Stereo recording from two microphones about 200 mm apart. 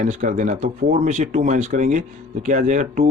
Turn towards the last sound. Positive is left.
turn(degrees=-40)  # may be behind; listen again after turning